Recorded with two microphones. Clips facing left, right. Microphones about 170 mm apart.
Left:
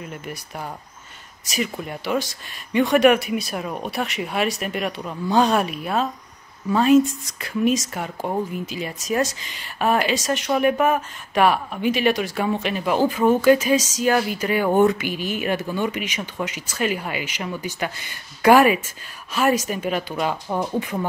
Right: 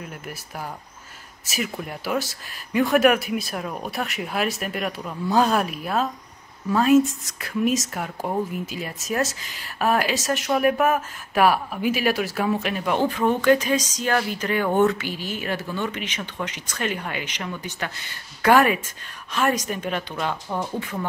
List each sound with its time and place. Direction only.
0.0 s speech: centre (ahead or behind); by 21.0 s 15° left (ahead or behind)